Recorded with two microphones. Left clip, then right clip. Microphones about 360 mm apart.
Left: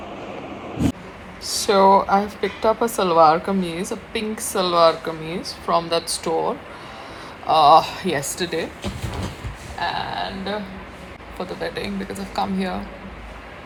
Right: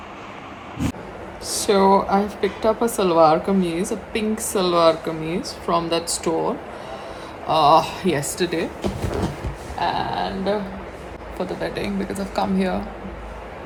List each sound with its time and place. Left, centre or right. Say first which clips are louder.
1.5 s speech: left 2 dB; centre
7.4 s speech: left 2 dB; centre
9.7 s a sound: right 2 dB; centre
11.3 s speech: right 1 dB; centre